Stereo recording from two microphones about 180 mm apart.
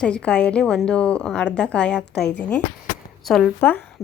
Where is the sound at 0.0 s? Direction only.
5° left (ahead or behind).